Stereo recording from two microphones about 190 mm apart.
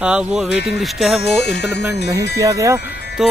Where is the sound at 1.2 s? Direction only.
60° left (ahead or behind).